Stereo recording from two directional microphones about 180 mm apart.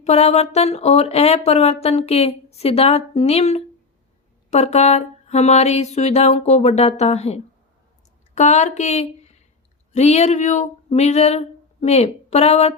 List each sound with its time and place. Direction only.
0.0 s speech: 35° left (ahead or behind)